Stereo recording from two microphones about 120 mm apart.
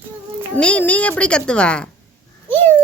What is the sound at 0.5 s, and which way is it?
A child's voice, 10° left (ahead or behind).